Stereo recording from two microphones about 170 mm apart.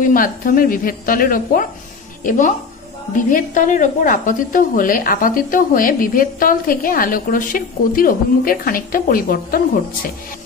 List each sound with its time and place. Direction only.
0.0 s a woman's voice: 55° left (ahead or behind)